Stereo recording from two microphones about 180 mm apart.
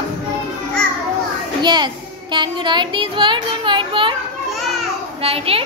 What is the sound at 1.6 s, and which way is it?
A child's voice, 25° right (ahead or behind).